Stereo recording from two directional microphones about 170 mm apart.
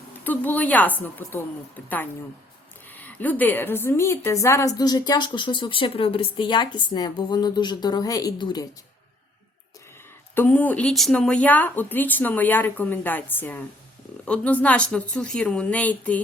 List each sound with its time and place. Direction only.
0.3 s speech: 10° left (ahead or behind)
2.9 s a woman's voice: 10° left (ahead or behind); by 8.6 s 25° left (ahead or behind)
10.3 s speech: 10° left (ahead or behind)